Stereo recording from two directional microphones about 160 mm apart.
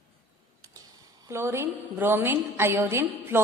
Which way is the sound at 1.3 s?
15° right (ahead or behind).